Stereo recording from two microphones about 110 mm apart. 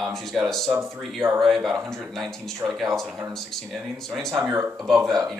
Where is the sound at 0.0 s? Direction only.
Centre (ahead or behind).